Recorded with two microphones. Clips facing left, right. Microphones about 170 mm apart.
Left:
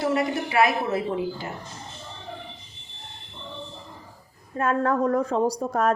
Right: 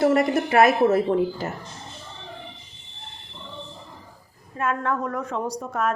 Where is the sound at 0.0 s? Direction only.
50° right (ahead or behind).